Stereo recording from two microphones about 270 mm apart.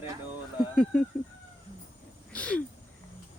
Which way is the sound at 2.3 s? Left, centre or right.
Centre.